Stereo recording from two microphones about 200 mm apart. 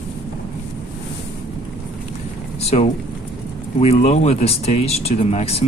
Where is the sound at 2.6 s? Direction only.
30° left (ahead or behind).